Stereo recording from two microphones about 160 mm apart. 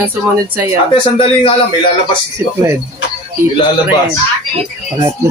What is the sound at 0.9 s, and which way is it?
Speech, 30° left (ahead or behind).